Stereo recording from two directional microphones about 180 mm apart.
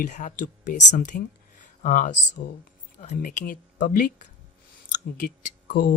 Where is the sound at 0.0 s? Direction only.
45° left (ahead or behind).